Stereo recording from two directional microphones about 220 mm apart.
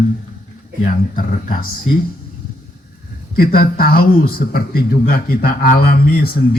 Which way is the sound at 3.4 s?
40° left (ahead or behind).